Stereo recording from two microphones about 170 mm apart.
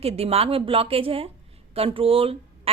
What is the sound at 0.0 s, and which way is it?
A woman's voice, 35° right (ahead or behind).